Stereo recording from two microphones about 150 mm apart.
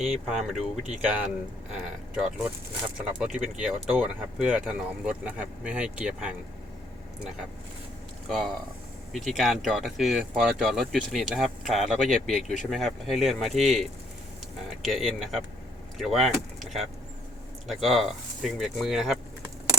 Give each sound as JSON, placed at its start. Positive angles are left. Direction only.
{"t": 0.0, "sound": "speech", "side_deg": 0}
{"t": 8.3, "sound": "speech", "side_deg": 0}
{"t": 14.8, "sound": "speech", "side_deg": 0}